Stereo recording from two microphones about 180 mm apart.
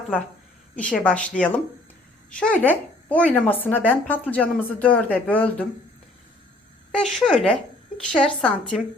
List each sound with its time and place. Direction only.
0.8 s a woman's voice: 10° left (ahead or behind)
6.9 s speech: 5° left (ahead or behind)